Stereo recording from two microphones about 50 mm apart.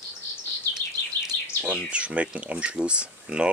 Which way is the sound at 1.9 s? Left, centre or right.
Right.